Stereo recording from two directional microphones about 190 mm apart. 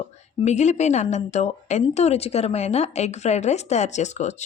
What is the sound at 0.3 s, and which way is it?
A woman's voice, 40° left (ahead or behind).